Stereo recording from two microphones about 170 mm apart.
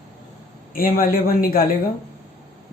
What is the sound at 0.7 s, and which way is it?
Speech, 60° left (ahead or behind).